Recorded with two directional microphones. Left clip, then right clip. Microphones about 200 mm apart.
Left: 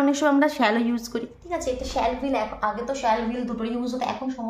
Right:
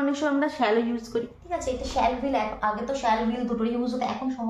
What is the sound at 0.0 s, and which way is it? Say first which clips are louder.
A woman's voice: left 5 dB; 65° left (ahead or behind).